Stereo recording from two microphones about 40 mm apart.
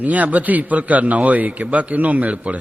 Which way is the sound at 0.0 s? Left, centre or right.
Right.